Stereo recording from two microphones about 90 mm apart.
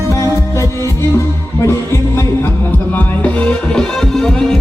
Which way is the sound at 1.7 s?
30° left (ahead or behind).